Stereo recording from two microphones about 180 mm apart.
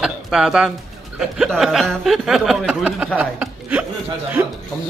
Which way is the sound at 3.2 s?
10° right (ahead or behind).